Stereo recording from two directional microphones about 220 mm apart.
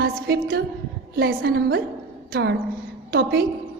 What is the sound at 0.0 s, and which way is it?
A woman's voice, 45° right (ahead or behind).